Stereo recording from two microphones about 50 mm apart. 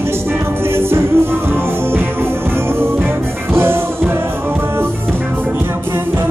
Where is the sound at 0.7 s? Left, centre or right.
Right.